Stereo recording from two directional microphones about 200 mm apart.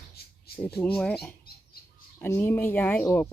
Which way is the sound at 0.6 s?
5° left (ahead or behind).